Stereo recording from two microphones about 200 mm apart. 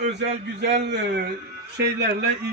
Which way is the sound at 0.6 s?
60° right (ahead or behind).